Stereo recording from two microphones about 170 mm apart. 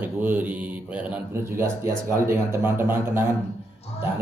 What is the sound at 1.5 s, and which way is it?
Speech, 15° right (ahead or behind).